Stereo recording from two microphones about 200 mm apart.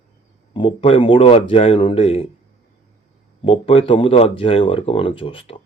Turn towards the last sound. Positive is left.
turn(degrees=25)  # may be behind; listen again after turning